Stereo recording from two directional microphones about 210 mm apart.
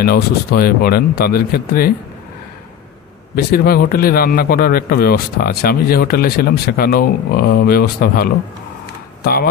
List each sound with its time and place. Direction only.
0.0 s a man's voice: 45° left (ahead or behind)
3.3 s a man's voice: 45° left (ahead or behind)